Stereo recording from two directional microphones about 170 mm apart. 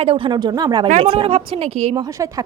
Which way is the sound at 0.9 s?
40° right (ahead or behind).